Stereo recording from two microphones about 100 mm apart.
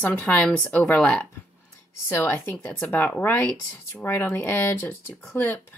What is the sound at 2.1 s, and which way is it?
Speech, 25° left (ahead or behind).